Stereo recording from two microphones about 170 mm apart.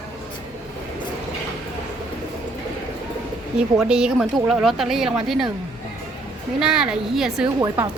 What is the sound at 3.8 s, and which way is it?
Speech, 5° right (ahead or behind).